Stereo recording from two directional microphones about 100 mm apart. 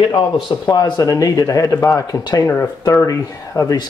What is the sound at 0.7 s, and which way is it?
Speech, 40° left (ahead or behind).